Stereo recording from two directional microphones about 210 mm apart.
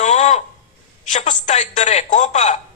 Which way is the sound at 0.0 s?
35° left (ahead or behind).